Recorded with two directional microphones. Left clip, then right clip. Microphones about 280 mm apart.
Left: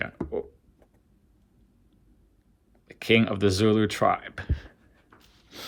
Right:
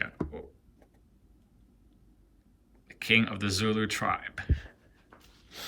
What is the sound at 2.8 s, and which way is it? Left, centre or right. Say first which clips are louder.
Speech: left 3 dB; centre.